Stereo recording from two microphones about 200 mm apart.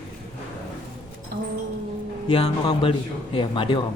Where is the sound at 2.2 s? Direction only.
25° left (ahead or behind).